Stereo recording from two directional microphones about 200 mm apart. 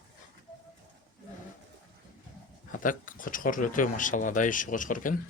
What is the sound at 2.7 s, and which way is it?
Speech, 40° left (ahead or behind).